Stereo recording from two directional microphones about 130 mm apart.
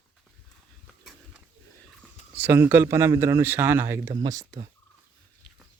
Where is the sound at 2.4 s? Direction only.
15° right (ahead or behind).